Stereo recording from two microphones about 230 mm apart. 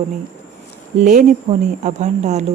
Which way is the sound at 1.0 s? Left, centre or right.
Right.